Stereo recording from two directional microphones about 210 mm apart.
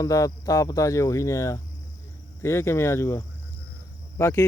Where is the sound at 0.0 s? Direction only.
15° left (ahead or behind).